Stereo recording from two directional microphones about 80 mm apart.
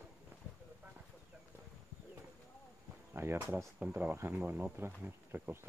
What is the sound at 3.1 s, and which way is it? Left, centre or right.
Speech, right.